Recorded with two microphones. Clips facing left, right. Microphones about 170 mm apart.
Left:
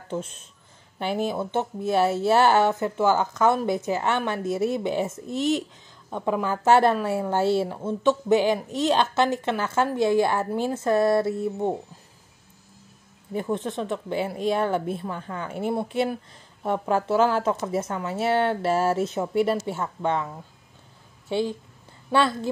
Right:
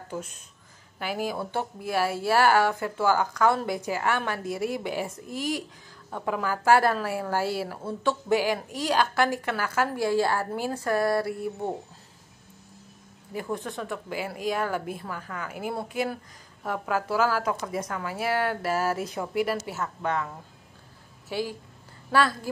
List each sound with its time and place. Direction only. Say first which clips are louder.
0.1 s speech: left 6 dB; 25° left (ahead or behind)
13.3 s speech: left 5 dB; 25° left (ahead or behind)
21.3 s speech: left 5 dB; 25° left (ahead or behind)